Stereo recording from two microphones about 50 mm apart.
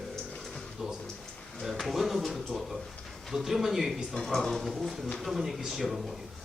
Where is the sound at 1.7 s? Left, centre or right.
Centre.